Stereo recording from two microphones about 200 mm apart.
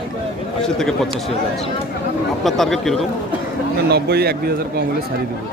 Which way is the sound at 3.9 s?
55° right (ahead or behind).